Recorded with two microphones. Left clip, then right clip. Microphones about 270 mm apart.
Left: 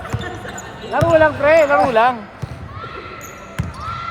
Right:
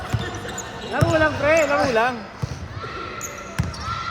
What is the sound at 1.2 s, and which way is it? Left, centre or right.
Speech, centre.